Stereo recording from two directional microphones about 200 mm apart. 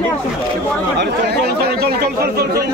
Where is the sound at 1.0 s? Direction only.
55° right (ahead or behind).